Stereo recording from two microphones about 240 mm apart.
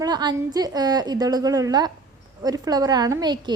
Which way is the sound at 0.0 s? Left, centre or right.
Centre.